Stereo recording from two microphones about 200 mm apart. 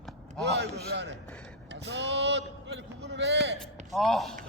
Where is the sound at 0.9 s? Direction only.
60° right (ahead or behind).